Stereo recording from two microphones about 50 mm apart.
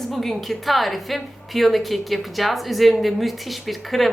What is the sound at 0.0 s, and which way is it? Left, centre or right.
A woman's voice, centre.